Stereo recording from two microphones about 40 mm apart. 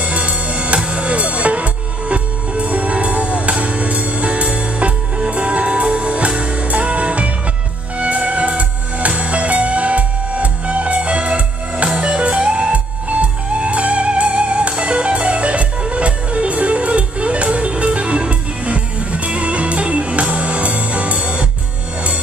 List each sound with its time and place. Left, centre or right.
0.0 s music: right